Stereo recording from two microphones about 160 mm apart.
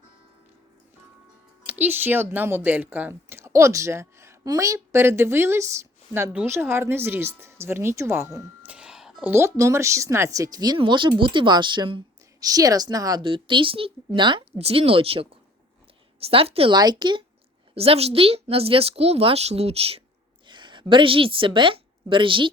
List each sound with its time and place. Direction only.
1.6 s speech: 10° right (ahead or behind)
8.6 s music: 5° right (ahead or behind)
9.3 s a woman's voice: 20° right (ahead or behind)